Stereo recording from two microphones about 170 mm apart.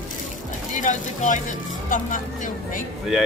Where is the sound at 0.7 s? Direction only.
50° left (ahead or behind).